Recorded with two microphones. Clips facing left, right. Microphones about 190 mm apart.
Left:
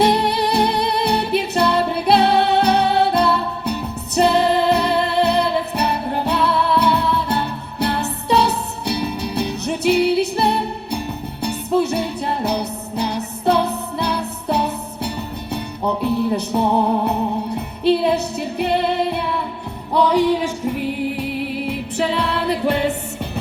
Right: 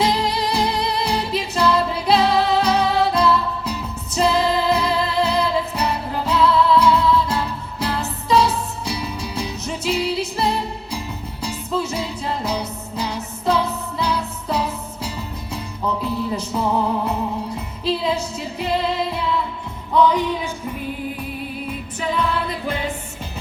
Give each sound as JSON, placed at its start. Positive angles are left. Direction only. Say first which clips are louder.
{"t": 0.0, "sound": "music", "louder": "left 4 dB", "side_deg": 60}